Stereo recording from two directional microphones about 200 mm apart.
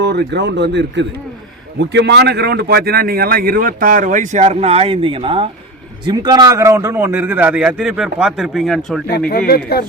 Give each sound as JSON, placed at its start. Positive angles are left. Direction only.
{"t": 0.0, "sound": "a man's voice", "side_deg": -55}